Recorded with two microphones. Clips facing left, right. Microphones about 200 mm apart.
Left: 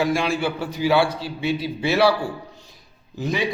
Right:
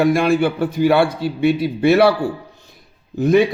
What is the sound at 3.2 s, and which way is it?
Speech, 55° right (ahead or behind).